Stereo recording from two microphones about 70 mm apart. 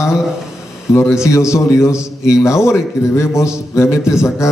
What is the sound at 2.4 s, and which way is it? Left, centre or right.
A man's voice, left.